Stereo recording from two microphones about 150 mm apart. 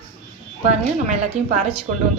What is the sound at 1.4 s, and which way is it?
Speech, 50° right (ahead or behind).